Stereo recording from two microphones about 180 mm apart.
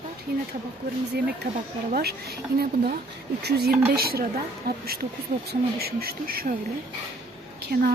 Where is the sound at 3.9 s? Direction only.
55° right (ahead or behind).